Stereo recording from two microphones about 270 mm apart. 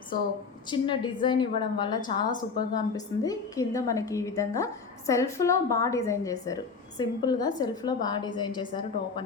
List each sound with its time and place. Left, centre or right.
0.7 s a woman's voice: centre